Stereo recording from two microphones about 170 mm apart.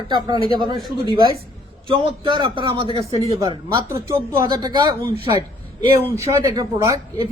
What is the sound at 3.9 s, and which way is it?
A woman's voice, 15° right (ahead or behind).